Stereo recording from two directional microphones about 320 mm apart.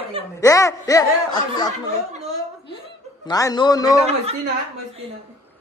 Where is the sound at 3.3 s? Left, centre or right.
Centre.